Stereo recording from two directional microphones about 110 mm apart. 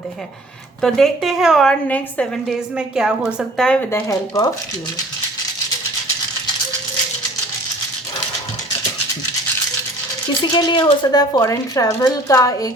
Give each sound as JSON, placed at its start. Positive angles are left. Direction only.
{"t": 0.8, "sound": "a woman's voice", "side_deg": 5}
{"t": 1.9, "sound": "a woman's voice", "side_deg": 10}
{"t": 2.5, "sound": "a woman's voice", "side_deg": -5}
{"t": 3.6, "sound": "a woman's voice", "side_deg": 10}
{"t": 3.9, "sound": "speech", "side_deg": 30}
{"t": 10.4, "sound": "speech", "side_deg": 45}